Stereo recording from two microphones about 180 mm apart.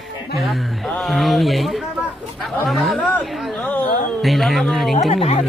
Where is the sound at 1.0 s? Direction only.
Centre (ahead or behind).